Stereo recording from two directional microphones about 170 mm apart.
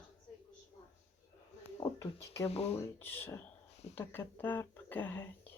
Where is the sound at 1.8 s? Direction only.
20° left (ahead or behind).